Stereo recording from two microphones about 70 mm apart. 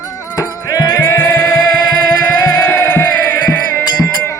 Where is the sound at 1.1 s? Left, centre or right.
Left.